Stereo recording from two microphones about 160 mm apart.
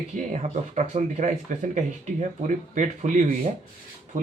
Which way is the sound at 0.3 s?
45° right (ahead or behind).